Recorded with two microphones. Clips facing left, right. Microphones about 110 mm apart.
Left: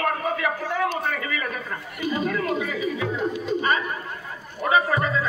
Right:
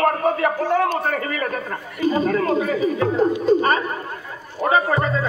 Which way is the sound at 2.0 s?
35° right (ahead or behind).